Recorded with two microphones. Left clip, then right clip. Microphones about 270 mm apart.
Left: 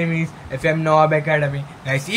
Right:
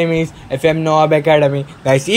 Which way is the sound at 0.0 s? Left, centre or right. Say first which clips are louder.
Right 8 dB; centre.